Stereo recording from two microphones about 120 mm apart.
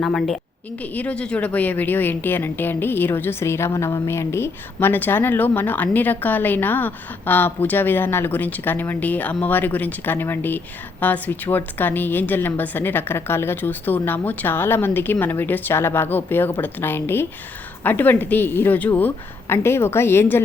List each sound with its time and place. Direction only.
0.0 s a woman's voice: centre (ahead or behind); by 20.4 s 20° left (ahead or behind)